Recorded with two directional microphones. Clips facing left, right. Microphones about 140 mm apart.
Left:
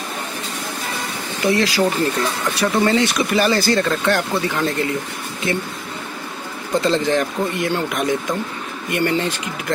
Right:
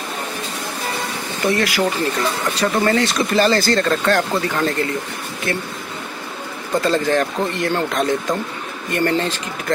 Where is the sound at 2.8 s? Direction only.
20° left (ahead or behind).